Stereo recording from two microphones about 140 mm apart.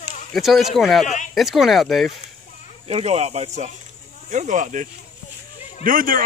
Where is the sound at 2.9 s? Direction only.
50° right (ahead or behind); by 4.8 s 65° right (ahead or behind).